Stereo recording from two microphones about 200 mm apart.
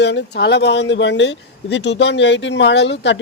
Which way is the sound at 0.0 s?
60° left (ahead or behind).